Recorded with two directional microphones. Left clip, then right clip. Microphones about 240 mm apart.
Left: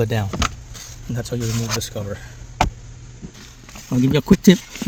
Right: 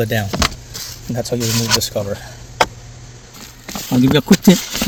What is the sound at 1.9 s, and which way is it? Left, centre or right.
Speech, left.